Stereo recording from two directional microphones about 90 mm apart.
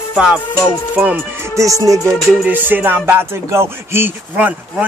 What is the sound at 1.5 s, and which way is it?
Speech, 35° right (ahead or behind).